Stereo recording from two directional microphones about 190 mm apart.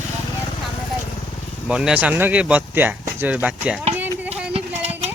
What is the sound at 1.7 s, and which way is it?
Speech, 5° right (ahead or behind).